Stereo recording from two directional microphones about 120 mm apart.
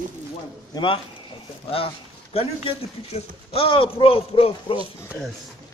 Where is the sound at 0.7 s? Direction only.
40° left (ahead or behind).